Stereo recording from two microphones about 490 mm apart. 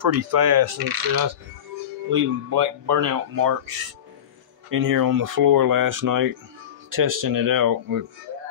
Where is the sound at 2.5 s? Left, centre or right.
Right.